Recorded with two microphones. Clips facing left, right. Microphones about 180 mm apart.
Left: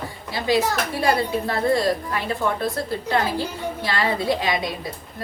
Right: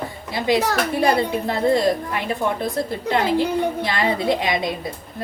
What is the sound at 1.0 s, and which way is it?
A woman's voice, 20° right (ahead or behind).